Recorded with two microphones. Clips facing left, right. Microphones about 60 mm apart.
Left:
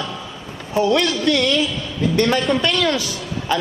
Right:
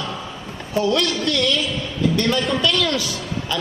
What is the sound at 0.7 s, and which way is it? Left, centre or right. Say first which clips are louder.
A man's voice: left 2 dB; left.